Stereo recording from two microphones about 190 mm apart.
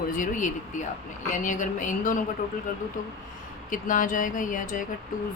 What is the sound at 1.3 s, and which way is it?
Speech, 40° left (ahead or behind).